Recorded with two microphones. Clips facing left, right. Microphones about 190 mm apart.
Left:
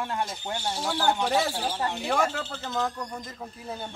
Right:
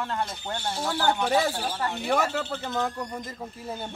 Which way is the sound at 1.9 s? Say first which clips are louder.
Right 3 dB; 5° right (ahead or behind).